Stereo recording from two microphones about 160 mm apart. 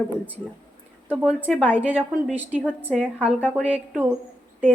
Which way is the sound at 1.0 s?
10° right (ahead or behind).